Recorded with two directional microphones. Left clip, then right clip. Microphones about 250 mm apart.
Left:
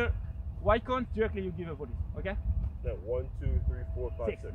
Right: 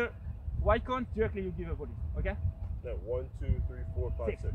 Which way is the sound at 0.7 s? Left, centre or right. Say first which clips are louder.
Left 2 dB; centre.